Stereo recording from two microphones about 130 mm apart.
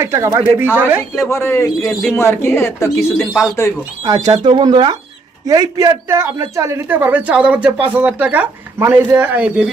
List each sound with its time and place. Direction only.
0.0 s a man's voice: 25° right (ahead or behind)
1.3 s speech: 20° left (ahead or behind)
1.8 s speech: centre (ahead or behind)
2.1 s speech: 20° left (ahead or behind)
3.2 s speech: centre (ahead or behind)
4.0 s a man's voice: 30° right (ahead or behind); by 9.6 s 10° right (ahead or behind)